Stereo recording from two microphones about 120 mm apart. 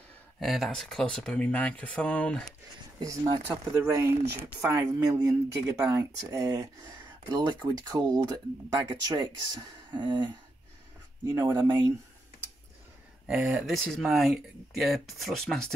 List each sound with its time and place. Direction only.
0.4 s speech: centre (ahead or behind)
3.0 s speech: 35° right (ahead or behind)
3.4 s speech: 20° right (ahead or behind)
4.7 s speech: 30° right (ahead or behind)
11.2 s speech: 25° right (ahead or behind)
13.3 s speech: 10° right (ahead or behind)